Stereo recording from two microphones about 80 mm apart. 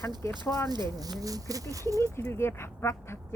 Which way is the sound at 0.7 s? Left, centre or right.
Right.